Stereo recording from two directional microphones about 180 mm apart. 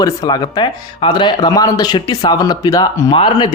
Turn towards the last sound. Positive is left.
turn(degrees=25)  # may be behind; listen again after turning